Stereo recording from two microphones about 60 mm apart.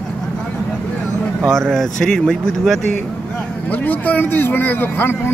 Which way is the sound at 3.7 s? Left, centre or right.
Left.